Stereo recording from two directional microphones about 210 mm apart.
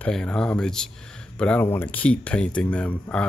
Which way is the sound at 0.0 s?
5° left (ahead or behind).